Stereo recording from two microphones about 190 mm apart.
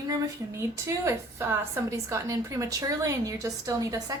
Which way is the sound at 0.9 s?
15° right (ahead or behind).